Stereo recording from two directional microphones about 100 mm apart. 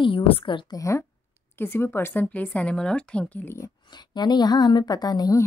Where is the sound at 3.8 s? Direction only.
45° left (ahead or behind).